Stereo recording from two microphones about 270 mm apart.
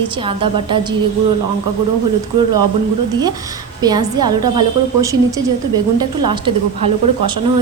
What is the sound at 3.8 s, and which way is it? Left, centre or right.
A woman's voice, centre.